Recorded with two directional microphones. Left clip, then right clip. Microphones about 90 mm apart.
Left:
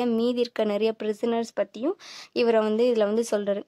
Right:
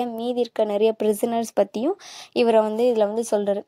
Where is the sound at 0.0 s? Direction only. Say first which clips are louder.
Even; 20° right (ahead or behind).